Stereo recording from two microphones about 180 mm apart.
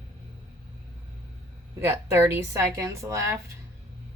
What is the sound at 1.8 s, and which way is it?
Speech, 15° right (ahead or behind).